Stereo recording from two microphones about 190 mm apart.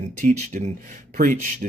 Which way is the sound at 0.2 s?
40° right (ahead or behind).